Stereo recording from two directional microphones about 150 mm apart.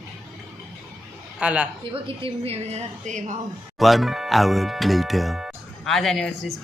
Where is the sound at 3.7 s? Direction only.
Centre (ahead or behind).